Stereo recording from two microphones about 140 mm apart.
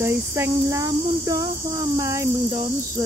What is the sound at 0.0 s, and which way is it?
Insect, 15° right (ahead or behind).